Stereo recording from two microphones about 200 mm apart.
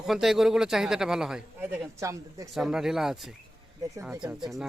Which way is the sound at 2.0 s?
15° right (ahead or behind).